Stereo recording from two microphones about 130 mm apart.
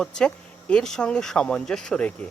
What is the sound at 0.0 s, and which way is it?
Speech, 5° left (ahead or behind).